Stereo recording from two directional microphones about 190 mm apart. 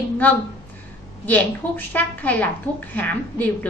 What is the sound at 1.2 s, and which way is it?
A woman's voice, 10° left (ahead or behind).